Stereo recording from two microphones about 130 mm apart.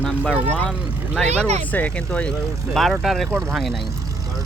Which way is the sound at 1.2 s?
55° right (ahead or behind).